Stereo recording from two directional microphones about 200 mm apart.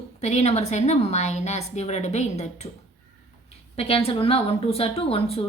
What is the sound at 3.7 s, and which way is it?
A woman's voice, 30° left (ahead or behind).